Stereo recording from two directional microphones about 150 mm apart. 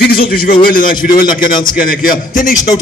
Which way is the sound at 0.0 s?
85° left.